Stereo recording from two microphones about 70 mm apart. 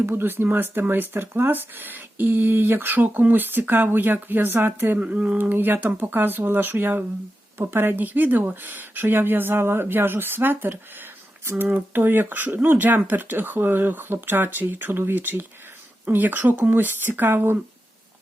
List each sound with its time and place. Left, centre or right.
0.0 s speech: right